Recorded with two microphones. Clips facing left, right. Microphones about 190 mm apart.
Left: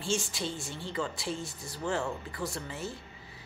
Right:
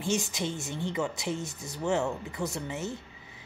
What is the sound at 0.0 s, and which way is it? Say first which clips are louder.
A woman's voice: right 3 dB; 20° right (ahead or behind).